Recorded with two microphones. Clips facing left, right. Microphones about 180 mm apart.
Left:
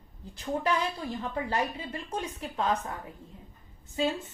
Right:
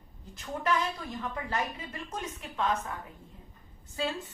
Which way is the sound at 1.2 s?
30° left (ahead or behind).